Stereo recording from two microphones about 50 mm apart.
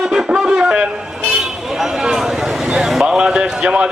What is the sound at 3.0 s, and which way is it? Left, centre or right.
Speech, centre.